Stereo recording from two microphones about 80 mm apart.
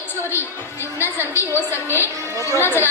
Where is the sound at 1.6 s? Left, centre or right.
Left.